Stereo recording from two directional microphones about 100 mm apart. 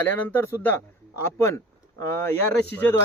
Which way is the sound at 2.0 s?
25° left (ahead or behind).